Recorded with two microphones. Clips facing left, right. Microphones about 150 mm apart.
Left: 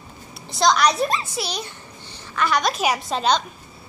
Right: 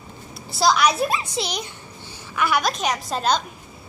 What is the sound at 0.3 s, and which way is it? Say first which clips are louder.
Speech: left 1 dB; 5° right (ahead or behind).